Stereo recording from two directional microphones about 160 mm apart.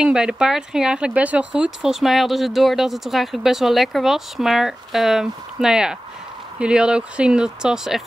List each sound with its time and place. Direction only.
0.0 s speech: 5° right (ahead or behind)